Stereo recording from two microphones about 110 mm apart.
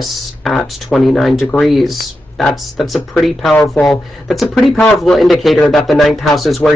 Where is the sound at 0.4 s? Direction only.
Centre (ahead or behind).